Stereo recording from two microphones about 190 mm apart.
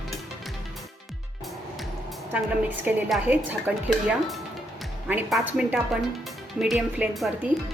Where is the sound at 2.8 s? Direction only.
10° right (ahead or behind).